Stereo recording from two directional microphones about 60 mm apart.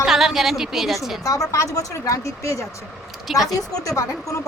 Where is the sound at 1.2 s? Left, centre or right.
Left.